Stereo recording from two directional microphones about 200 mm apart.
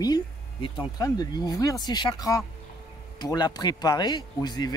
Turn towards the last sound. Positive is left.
turn(degrees=20)  # may be behind; listen again after turning